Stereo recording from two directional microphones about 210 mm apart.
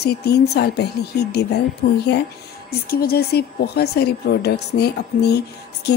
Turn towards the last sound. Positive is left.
turn(degrees=50)  # may be behind; listen again after turning